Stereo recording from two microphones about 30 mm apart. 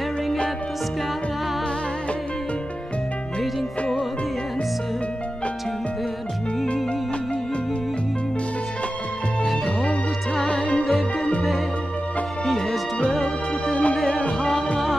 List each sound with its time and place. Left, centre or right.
10.5 s music: left
13.2 s music: centre
13.9 s music: centre